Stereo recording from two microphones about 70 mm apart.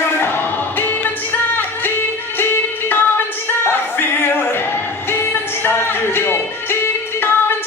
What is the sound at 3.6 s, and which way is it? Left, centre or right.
A capella, left.